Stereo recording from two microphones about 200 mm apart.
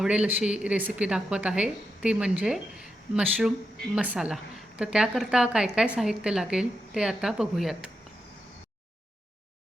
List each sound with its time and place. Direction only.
0.0 s a woman's voice: 5° right (ahead or behind)